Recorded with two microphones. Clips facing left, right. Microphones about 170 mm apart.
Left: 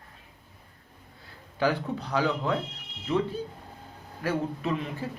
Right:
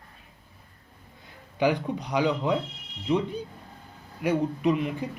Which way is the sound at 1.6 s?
15° right (ahead or behind).